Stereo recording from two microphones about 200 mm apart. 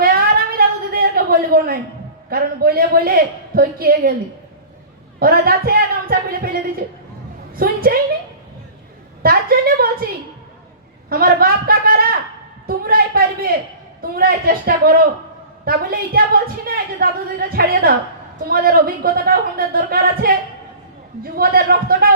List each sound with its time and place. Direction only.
0.0 s a sound: 50° right (ahead or behind)
2.3 s a man's voice: 50° right (ahead or behind)
5.2 s a woman's voice: 50° right (ahead or behind)
9.2 s a man's voice: 50° right (ahead or behind)
11.1 s a man's voice: 45° right (ahead or behind)
12.6 s a sound: 50° right (ahead or behind)
14.0 s a man's voice: 50° right (ahead or behind)
21.3 s a man's voice: 50° right (ahead or behind)